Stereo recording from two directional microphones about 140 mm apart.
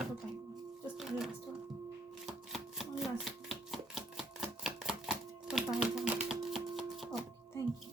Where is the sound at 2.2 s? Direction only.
Centre (ahead or behind).